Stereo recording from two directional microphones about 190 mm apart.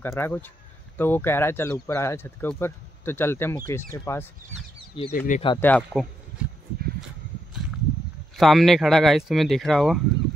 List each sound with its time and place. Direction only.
0.0 s speech: 10° left (ahead or behind)
5.1 s speech: 45° left (ahead or behind)
5.6 s speech: 5° left (ahead or behind)
8.4 s speech: centre (ahead or behind)